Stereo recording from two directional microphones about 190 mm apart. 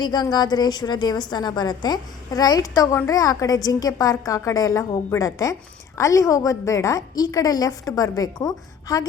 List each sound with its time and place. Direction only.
0.0 s a woman's voice: 20° left (ahead or behind)